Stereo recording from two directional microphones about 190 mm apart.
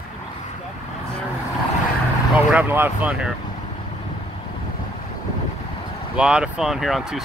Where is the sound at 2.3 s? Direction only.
10° right (ahead or behind).